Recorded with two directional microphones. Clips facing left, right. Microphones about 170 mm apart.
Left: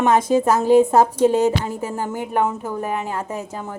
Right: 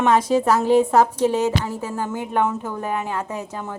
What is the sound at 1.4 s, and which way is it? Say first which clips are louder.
Speech: left 2 dB; 15° left (ahead or behind).